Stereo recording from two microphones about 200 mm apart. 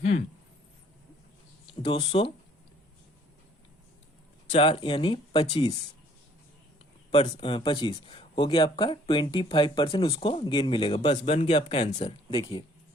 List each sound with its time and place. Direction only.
0.0 s speech: 35° left (ahead or behind)
1.6 s speech: 25° left (ahead or behind)
4.5 s speech: 30° left (ahead or behind)
7.1 s speech: 30° left (ahead or behind)